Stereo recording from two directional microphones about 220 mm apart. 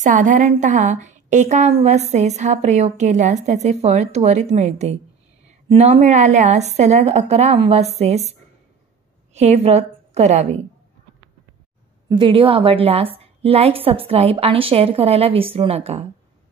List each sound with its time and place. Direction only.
0.0 s a woman's voice: 35° right (ahead or behind)
12.1 s a woman's voice: 20° right (ahead or behind)